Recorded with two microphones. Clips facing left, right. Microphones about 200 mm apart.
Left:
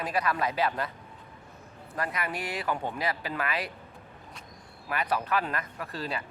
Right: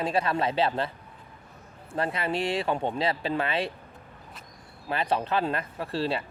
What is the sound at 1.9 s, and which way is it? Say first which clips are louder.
Speech: right 5 dB; 30° right (ahead or behind).